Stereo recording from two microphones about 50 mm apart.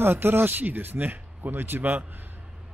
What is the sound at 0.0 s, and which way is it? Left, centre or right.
Speech, right.